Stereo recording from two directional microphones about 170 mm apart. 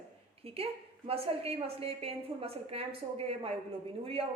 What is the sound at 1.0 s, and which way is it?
A woman's voice, 35° right (ahead or behind).